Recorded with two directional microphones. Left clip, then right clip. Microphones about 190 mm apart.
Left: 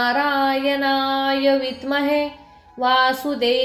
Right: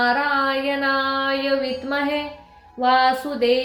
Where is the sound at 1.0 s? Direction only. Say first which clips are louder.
Left 2 dB; 35° left (ahead or behind).